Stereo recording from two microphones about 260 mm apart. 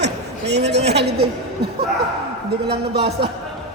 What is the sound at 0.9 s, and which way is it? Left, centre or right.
Speech, right.